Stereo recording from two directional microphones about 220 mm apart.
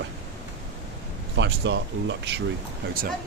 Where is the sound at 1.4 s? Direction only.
55° right (ahead or behind).